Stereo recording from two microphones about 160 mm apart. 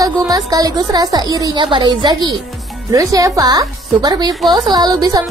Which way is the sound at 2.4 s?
Centre (ahead or behind).